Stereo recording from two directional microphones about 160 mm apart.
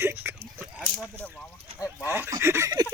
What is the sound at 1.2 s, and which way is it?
Speech, 10° left (ahead or behind).